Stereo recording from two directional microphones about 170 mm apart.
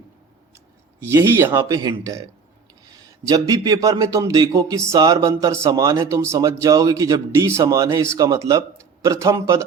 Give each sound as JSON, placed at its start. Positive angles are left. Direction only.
{"t": 1.0, "sound": "speech", "side_deg": -15}